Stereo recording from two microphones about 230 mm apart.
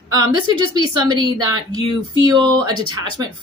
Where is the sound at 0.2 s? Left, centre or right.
Centre.